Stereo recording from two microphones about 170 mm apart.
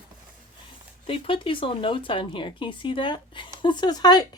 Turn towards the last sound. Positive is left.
turn(degrees=25)  # may be behind; listen again after turning